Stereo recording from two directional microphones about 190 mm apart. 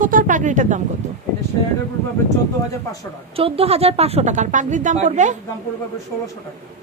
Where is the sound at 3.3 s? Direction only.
30° right (ahead or behind).